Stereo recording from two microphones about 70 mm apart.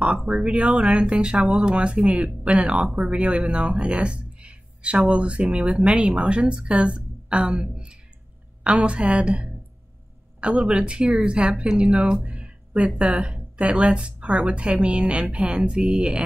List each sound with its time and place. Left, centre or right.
0.3 s speech: centre
10.6 s speech: centre